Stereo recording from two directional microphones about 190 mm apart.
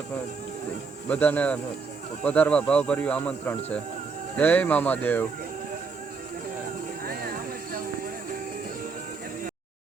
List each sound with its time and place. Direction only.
1.1 s speech: 10° left (ahead or behind)
7.0 s clip-clop: 50° right (ahead or behind)